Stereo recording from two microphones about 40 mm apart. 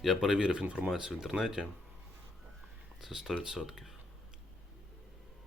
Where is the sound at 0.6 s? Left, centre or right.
Right.